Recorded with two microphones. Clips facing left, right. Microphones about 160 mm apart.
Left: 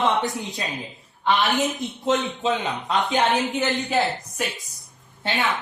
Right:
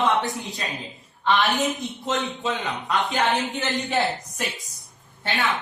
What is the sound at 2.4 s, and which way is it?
Speech, 20° left (ahead or behind).